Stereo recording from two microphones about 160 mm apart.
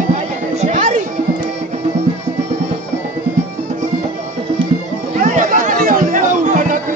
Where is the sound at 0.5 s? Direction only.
50° right (ahead or behind).